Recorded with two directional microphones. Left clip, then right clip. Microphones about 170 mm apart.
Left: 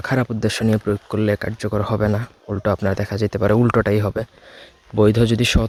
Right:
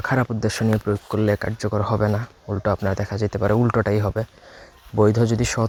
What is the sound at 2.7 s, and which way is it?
Speech, 50° left (ahead or behind).